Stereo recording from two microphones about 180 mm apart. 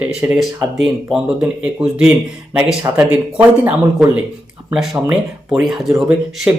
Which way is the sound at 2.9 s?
15° right (ahead or behind).